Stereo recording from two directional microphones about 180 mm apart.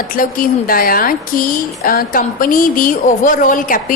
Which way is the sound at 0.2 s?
50° left (ahead or behind).